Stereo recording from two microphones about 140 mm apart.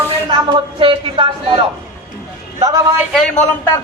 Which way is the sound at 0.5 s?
35° right (ahead or behind).